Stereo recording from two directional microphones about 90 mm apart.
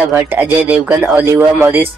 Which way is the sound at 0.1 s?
20° right (ahead or behind).